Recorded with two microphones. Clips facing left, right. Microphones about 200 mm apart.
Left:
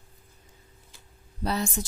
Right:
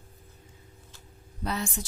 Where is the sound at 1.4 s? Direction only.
35° left (ahead or behind).